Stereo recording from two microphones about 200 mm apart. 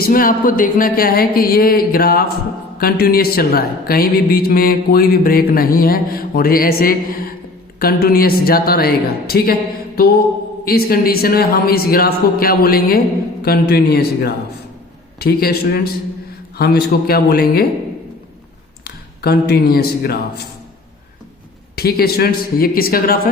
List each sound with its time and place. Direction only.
0.0 s speech: 45° left (ahead or behind)
18.9 s speech: 50° left (ahead or behind)
21.8 s speech: 50° left (ahead or behind)